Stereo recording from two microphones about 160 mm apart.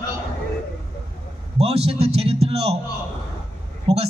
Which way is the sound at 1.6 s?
40° right (ahead or behind).